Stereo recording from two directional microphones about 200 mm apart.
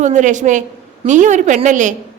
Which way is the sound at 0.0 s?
40° right (ahead or behind).